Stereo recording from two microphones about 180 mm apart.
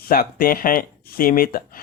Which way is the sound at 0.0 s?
55° left (ahead or behind).